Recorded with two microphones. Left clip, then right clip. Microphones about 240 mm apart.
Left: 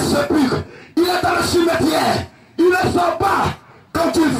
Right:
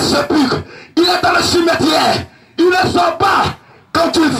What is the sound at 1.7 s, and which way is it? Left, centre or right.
Music, right.